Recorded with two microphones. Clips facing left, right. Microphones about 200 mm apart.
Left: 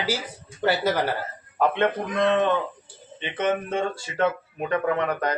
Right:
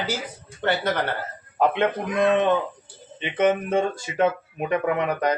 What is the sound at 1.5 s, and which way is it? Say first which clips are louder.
Speech: right 1 dB; 15° right (ahead or behind).